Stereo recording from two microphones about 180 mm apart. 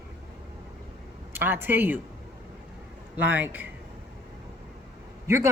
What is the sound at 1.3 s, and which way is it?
Speech, 10° right (ahead or behind).